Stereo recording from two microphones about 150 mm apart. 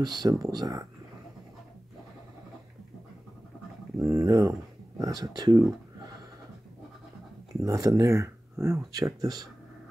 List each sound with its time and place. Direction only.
0.0 s speech: 25° right (ahead or behind)
4.0 s speech: 20° right (ahead or behind)
7.6 s speech: 20° right (ahead or behind)